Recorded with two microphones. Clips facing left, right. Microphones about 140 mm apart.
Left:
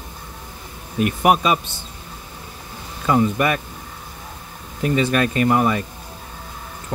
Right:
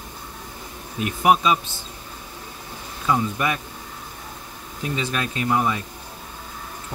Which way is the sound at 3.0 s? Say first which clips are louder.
Left 5 dB; 60° left (ahead or behind).